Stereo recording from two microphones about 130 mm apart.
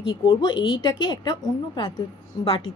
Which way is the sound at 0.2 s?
35° left (ahead or behind).